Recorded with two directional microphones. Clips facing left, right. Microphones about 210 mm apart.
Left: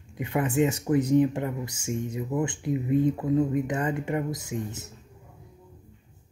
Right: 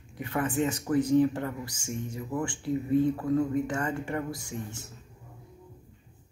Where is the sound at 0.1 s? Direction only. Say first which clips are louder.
Left 3 dB; 20° left (ahead or behind).